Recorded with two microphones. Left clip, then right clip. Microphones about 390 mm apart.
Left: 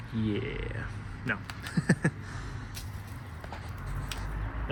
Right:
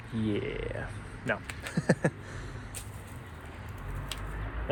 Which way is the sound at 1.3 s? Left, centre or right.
Centre.